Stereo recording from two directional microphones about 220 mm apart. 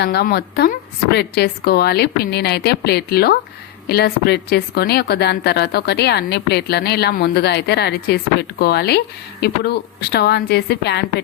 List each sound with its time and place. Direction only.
0.0 s a woman's voice: 45° left (ahead or behind)